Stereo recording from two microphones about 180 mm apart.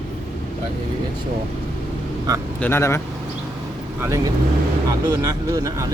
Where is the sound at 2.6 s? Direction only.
15° left (ahead or behind).